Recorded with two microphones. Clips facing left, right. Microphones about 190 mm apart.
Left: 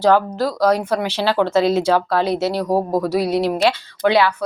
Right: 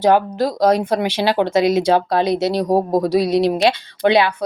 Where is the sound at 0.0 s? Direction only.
15° right (ahead or behind).